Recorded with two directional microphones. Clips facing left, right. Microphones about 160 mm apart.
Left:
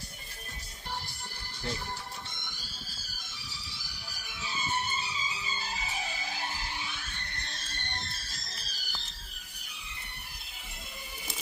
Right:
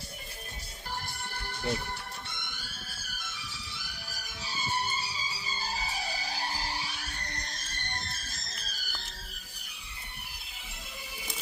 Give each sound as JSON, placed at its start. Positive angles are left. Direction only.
{"t": 1.0, "sound": "music", "side_deg": -60}